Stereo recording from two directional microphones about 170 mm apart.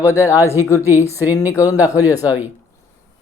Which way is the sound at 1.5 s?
20° left (ahead or behind).